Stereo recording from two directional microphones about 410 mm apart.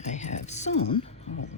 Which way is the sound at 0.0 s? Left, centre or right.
Centre.